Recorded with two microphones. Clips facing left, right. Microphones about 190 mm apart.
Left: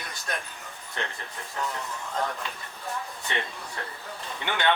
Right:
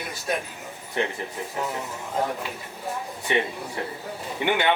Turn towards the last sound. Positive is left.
turn(degrees=-15)  # may be behind; listen again after turning